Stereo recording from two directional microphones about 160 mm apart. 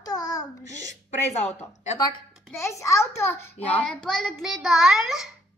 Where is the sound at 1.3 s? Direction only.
45° left (ahead or behind).